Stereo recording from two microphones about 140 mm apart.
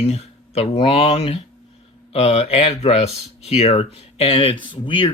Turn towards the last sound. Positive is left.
turn(degrees=35)  # may be behind; listen again after turning